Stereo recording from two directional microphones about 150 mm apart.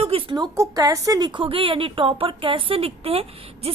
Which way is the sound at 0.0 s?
40° right (ahead or behind).